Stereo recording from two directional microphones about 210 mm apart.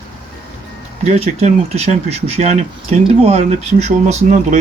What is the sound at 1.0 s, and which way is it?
Speech, 30° right (ahead or behind).